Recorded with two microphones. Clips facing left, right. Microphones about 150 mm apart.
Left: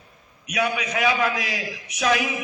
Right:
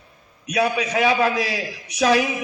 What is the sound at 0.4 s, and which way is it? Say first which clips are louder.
A man's voice: right 4 dB; 30° right (ahead or behind).